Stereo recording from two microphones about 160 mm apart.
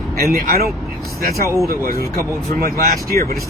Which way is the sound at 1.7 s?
65° right (ahead or behind).